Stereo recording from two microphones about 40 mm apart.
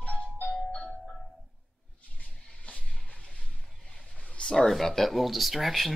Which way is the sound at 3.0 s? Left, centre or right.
Left.